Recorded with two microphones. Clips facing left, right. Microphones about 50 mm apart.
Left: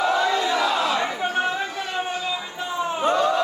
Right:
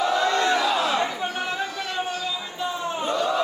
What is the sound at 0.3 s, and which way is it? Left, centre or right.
Crowd, right.